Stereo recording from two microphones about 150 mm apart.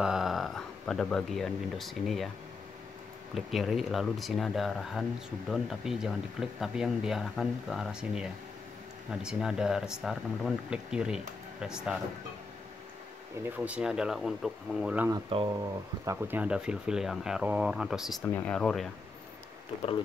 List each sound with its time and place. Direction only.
0.0 s speech: centre (ahead or behind)
3.3 s speech: centre (ahead or behind)
13.4 s speech: 10° right (ahead or behind)
15.3 s speech: 35° right (ahead or behind)
16.1 s speech: 15° right (ahead or behind)
18.2 s speech: 10° left (ahead or behind)